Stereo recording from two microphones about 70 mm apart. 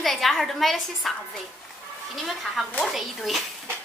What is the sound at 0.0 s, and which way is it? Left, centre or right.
A woman's voice, centre.